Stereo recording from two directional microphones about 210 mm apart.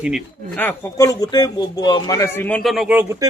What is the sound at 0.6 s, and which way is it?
Speech, 10° left (ahead or behind).